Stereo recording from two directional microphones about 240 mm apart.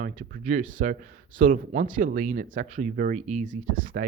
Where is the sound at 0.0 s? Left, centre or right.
Right.